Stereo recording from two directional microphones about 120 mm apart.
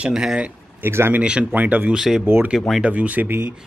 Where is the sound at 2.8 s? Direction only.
10° right (ahead or behind).